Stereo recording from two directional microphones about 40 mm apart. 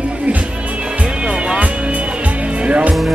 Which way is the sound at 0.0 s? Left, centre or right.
Right.